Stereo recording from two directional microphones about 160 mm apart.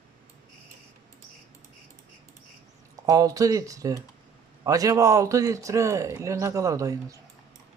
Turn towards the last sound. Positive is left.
turn(degrees=-20)  # may be behind; listen again after turning